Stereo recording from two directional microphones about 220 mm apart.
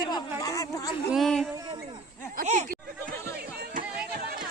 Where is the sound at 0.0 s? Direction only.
20° left (ahead or behind).